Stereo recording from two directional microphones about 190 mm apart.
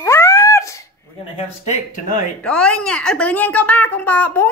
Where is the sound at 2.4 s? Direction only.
5° left (ahead or behind).